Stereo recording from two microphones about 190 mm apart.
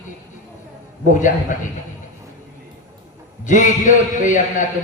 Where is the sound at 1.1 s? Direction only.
40° left (ahead or behind).